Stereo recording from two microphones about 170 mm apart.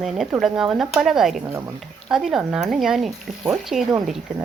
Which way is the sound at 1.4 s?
15° right (ahead or behind).